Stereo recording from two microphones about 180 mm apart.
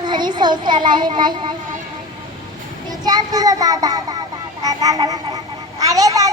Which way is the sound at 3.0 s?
20° right (ahead or behind).